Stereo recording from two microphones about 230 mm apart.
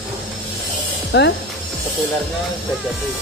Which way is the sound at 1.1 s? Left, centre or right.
Left.